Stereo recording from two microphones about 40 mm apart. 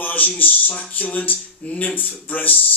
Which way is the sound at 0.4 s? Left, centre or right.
Left.